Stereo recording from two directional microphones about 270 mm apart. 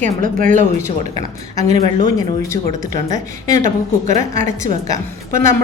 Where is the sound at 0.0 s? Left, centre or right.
Right.